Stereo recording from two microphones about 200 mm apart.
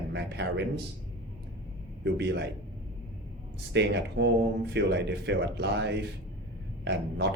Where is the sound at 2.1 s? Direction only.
60° right (ahead or behind).